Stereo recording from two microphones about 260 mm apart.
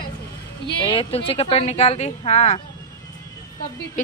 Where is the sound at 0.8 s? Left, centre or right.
Centre.